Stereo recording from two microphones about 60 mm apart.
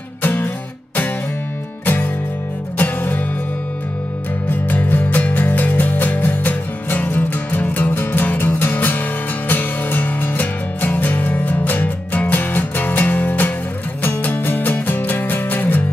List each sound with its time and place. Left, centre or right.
0.2 s music: left
2.8 s music: left
4.5 s music: left